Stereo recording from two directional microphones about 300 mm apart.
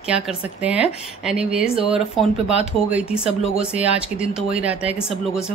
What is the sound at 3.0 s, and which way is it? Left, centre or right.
Speech, centre.